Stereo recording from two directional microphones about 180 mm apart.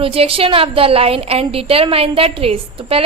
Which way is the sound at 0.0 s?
30° right (ahead or behind).